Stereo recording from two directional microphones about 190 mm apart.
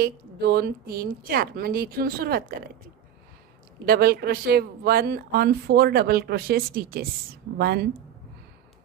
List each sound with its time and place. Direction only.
0.0 s speech: 55° right (ahead or behind)
3.8 s a woman's voice: 55° right (ahead or behind)